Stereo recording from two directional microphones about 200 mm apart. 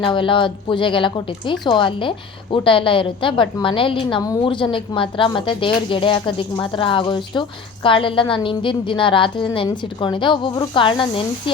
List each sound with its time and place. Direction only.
0.0 s speech: 25° left (ahead or behind)